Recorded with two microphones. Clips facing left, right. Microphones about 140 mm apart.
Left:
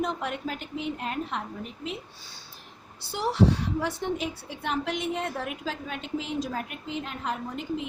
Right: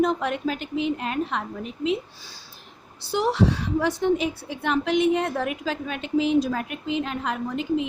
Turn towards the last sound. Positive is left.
turn(degrees=-90)